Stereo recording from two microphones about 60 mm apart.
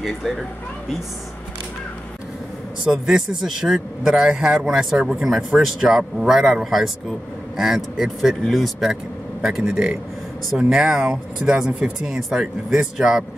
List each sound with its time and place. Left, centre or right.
0.0 s speech: centre
2.8 s speech: centre